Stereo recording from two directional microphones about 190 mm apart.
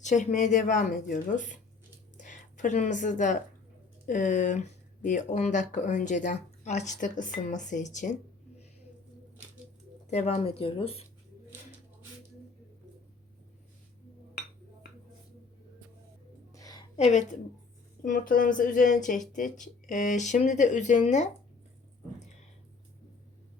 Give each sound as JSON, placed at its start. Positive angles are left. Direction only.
{"t": 0.0, "sound": "speech", "side_deg": 40}
{"t": 10.1, "sound": "speech", "side_deg": 35}
{"t": 16.5, "sound": "a sound", "side_deg": 20}
{"t": 17.0, "sound": "speech", "side_deg": 40}